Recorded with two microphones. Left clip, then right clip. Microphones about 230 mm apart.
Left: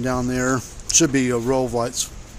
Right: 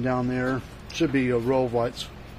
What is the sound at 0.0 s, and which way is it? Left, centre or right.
Speech, left.